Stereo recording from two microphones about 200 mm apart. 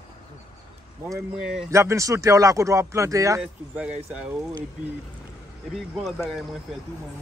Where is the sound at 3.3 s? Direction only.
5° right (ahead or behind).